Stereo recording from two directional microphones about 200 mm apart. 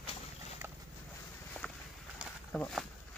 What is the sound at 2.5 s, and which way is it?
Speech, 5° left (ahead or behind).